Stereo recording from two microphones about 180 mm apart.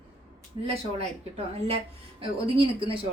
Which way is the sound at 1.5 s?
35° right (ahead or behind).